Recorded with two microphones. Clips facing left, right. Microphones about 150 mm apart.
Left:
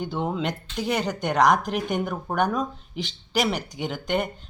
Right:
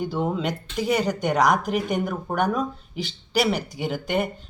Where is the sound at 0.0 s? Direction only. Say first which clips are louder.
Right 2 dB; centre (ahead or behind).